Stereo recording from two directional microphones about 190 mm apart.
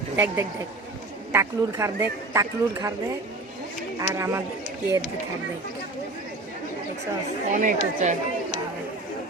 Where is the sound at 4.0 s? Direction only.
15° right (ahead or behind).